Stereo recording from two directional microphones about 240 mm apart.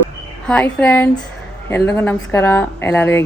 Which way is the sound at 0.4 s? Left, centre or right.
Centre.